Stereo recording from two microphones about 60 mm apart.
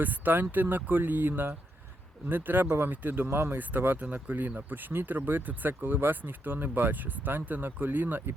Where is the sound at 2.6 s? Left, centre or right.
Right.